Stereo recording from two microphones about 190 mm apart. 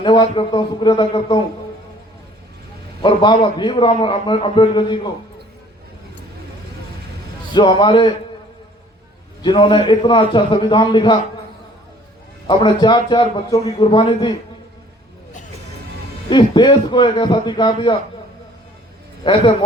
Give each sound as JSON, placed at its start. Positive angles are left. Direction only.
{"t": 0.0, "sound": "a man's voice", "side_deg": 25}
{"t": 3.0, "sound": "a man's voice", "side_deg": 25}
{"t": 7.5, "sound": "a man's voice", "side_deg": 25}
{"t": 9.4, "sound": "a man's voice", "side_deg": 25}
{"t": 12.5, "sound": "a man's voice", "side_deg": 25}
{"t": 13.8, "sound": "a man's voice", "side_deg": 30}
{"t": 16.3, "sound": "a man's voice", "side_deg": 25}
{"t": 19.2, "sound": "a man's voice", "side_deg": 30}